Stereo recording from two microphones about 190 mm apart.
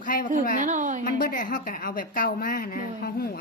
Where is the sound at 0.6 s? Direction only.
40° right (ahead or behind).